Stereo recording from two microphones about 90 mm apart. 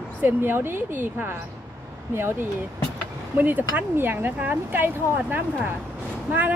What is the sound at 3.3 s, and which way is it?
Speech, 20° right (ahead or behind).